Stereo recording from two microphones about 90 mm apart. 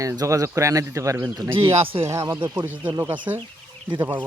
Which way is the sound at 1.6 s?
80° right.